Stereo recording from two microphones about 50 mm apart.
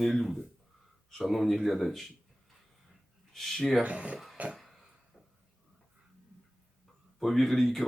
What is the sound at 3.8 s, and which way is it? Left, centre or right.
Speech, right.